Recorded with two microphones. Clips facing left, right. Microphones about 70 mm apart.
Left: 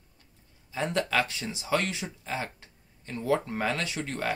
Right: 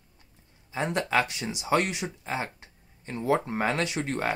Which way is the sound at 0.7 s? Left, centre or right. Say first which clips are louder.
Right 1 dB; right.